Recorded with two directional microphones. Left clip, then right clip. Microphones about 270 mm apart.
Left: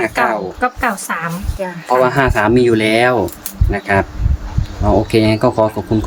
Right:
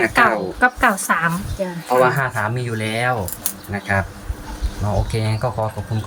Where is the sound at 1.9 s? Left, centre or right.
Left.